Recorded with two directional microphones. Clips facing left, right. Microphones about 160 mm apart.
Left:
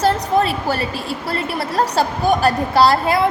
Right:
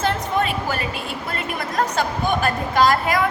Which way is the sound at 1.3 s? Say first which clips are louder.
Left 5 dB; 35° left (ahead or behind).